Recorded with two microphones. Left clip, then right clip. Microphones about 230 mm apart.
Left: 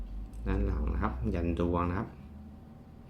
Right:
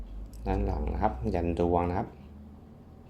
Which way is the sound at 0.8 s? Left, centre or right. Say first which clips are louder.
Right 6 dB; centre.